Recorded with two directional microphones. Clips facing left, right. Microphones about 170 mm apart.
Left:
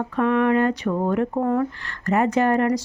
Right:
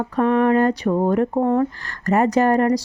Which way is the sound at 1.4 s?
25° right (ahead or behind).